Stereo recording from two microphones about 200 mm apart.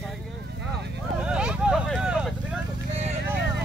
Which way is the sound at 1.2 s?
5° right (ahead or behind).